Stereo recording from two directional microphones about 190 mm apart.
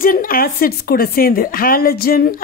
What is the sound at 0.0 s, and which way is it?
A woman's voice, 45° left (ahead or behind).